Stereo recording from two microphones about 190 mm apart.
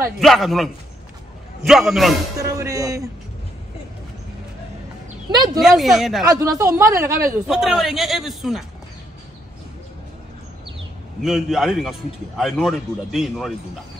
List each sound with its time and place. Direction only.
0.2 s speech: centre (ahead or behind)
2.3 s speech: 15° right (ahead or behind)
5.3 s speech: 20° right (ahead or behind)
5.6 s speech: centre (ahead or behind)
6.2 s speech: 15° right (ahead or behind)
7.4 s speech: centre (ahead or behind)
11.2 s speech: centre (ahead or behind)